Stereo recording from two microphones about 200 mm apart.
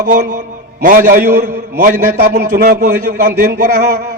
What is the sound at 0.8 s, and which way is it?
A man's voice, 40° right (ahead or behind).